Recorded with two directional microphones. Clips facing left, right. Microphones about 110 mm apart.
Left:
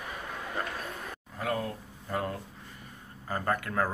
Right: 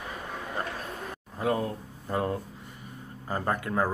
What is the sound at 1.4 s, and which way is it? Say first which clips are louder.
Speech: right 4 dB; 25° right (ahead or behind).